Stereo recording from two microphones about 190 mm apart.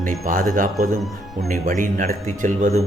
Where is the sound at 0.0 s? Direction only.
45° right (ahead or behind).